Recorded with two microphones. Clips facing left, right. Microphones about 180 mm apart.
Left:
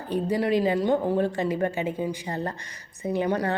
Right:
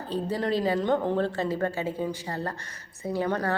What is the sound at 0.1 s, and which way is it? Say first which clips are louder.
A woman's voice: left 4 dB; 15° left (ahead or behind).